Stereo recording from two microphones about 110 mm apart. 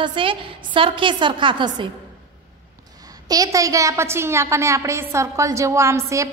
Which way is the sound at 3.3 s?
30° right (ahead or behind).